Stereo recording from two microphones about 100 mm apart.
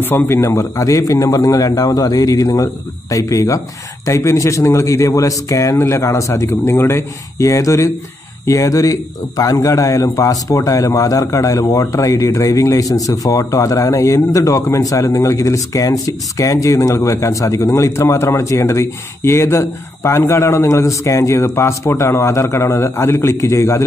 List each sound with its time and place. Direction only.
0.0 s a man's voice: 25° left (ahead or behind)